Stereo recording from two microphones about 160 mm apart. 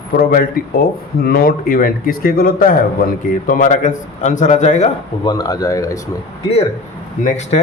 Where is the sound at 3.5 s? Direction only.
50° left (ahead or behind).